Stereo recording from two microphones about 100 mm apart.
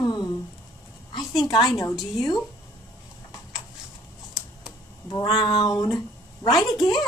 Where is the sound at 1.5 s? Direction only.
40° left (ahead or behind).